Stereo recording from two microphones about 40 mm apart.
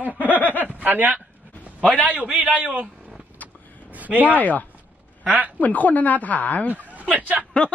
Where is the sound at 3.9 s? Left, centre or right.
Right.